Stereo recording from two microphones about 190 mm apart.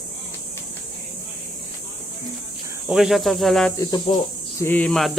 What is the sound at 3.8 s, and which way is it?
Speech, 20° left (ahead or behind).